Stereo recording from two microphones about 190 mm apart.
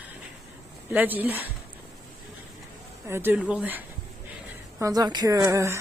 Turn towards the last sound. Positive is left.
turn(degrees=-15)  # may be behind; listen again after turning